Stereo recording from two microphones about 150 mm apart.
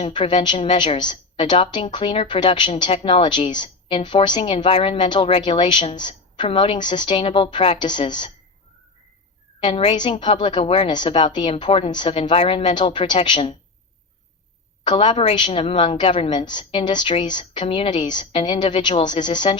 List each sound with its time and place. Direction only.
0.3 s a woman's voice: 35° left (ahead or behind)
9.6 s a woman's voice: 40° left (ahead or behind)
14.8 s a woman's voice: 35° left (ahead or behind)